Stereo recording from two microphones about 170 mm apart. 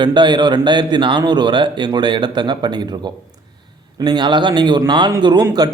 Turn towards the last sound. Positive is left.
turn(degrees=-25)  # may be behind; listen again after turning